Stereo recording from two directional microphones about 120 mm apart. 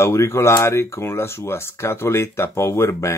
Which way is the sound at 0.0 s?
20° left (ahead or behind).